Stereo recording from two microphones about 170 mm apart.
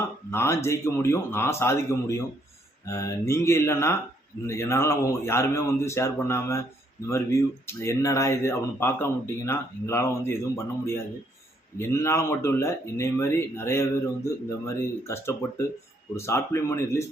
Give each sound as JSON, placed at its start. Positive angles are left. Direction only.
{"t": 0.3, "sound": "speech", "side_deg": 15}